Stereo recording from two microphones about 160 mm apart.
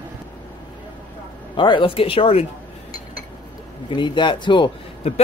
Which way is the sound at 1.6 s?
30° left (ahead or behind).